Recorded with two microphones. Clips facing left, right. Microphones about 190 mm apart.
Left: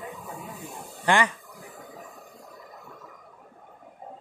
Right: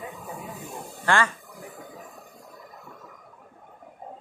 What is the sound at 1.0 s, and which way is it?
Speech, 15° left (ahead or behind).